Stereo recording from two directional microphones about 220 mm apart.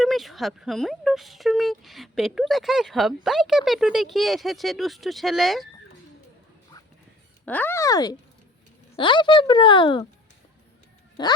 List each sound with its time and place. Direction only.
0.0 s speech: centre (ahead or behind)
7.4 s a woman's voice: 10° left (ahead or behind)
11.2 s a woman's voice: 20° left (ahead or behind)